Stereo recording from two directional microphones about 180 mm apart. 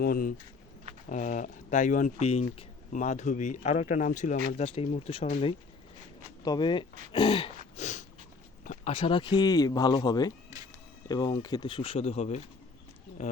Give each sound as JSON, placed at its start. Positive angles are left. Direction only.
{"t": 0.0, "sound": "speech", "side_deg": 50}
{"t": 6.4, "sound": "speech", "side_deg": 25}
{"t": 7.8, "sound": "snort", "side_deg": 40}
{"t": 8.6, "sound": "a sound", "side_deg": 45}
{"t": 8.9, "sound": "speech", "side_deg": 30}